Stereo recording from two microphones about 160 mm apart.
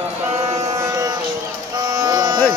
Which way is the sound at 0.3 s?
40° right (ahead or behind).